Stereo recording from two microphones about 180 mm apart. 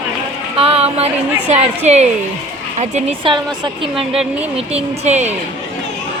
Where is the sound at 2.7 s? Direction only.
35° right (ahead or behind).